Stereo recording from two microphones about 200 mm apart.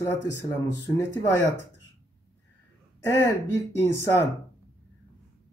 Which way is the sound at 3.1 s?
15° left (ahead or behind).